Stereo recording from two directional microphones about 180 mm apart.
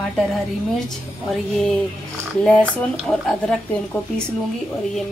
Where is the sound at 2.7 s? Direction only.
Centre (ahead or behind).